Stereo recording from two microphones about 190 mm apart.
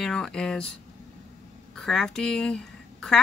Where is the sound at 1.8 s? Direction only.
Centre (ahead or behind).